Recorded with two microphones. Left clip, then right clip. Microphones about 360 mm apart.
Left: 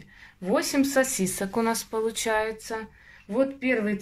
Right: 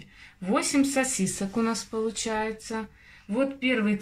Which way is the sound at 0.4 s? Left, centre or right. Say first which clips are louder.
Left 1 dB; centre.